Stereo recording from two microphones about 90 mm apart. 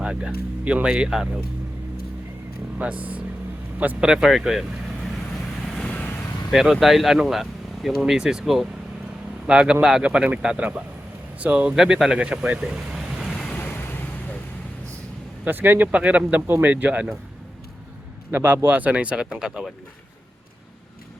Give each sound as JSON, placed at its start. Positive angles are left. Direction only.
{"t": 0.0, "sound": "speech", "side_deg": -10}
{"t": 2.7, "sound": "speech", "side_deg": -15}
{"t": 5.9, "sound": "vehicle", "side_deg": 20}
{"t": 6.5, "sound": "speech", "side_deg": -5}
{"t": 13.2, "sound": "vehicle", "side_deg": 5}
{"t": 13.6, "sound": "vehicle", "side_deg": 25}
{"t": 15.4, "sound": "speech", "side_deg": -20}
{"t": 18.3, "sound": "speech", "side_deg": -25}